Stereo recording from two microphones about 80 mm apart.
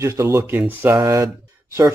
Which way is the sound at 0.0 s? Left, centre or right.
Right.